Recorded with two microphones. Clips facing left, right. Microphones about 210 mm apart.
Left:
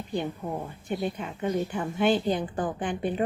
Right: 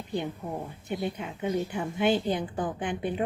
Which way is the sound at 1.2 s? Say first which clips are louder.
Left 1 dB; 10° right (ahead or behind).